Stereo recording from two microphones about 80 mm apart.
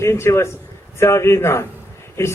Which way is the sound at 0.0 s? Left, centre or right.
Left.